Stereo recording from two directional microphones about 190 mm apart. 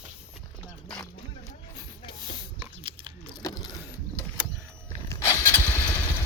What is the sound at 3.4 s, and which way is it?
Vehicle, 20° left (ahead or behind).